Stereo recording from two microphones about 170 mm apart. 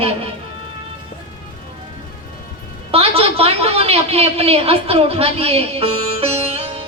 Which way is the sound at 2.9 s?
35° right (ahead or behind).